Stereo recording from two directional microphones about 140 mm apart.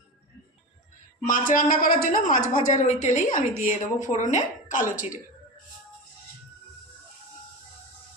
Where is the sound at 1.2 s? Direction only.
75° left (ahead or behind).